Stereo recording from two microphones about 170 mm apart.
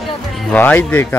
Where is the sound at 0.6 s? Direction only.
10° left (ahead or behind).